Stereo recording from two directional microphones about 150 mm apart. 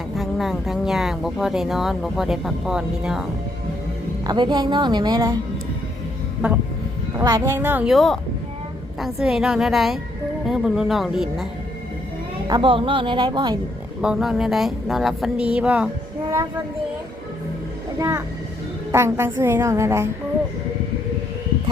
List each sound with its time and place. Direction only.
0.2 s speech: centre (ahead or behind)
4.3 s a woman's voice: 30° right (ahead or behind)
7.2 s a woman's voice: 20° right (ahead or behind)
7.9 s speech: centre (ahead or behind)
12.5 s speech: 30° right (ahead or behind)
14.0 s speech: 5° right (ahead or behind)
18.9 s a woman's voice: 15° right (ahead or behind)